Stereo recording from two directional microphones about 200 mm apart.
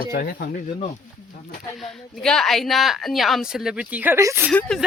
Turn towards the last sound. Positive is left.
turn(degrees=5)  # may be behind; listen again after turning